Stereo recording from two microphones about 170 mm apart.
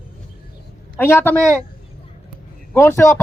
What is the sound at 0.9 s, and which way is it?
Speech, 15° left (ahead or behind).